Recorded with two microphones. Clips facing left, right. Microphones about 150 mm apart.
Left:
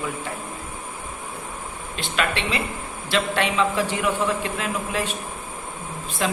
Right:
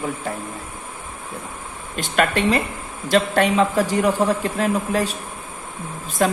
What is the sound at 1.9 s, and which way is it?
A man's voice, 45° right (ahead or behind).